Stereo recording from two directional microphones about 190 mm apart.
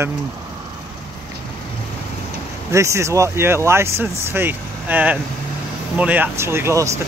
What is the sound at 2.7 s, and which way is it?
Speech, 15° right (ahead or behind).